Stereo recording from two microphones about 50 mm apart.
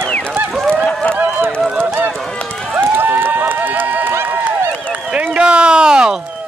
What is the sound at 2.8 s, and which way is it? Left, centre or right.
Run, right.